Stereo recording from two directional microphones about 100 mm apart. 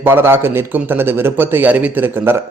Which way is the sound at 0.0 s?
25° right (ahead or behind).